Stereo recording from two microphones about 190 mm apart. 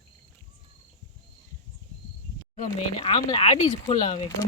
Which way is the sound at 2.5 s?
35° left (ahead or behind).